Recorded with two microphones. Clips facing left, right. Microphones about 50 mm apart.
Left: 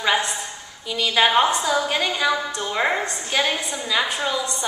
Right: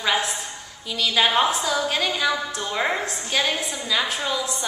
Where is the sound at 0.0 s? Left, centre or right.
Centre.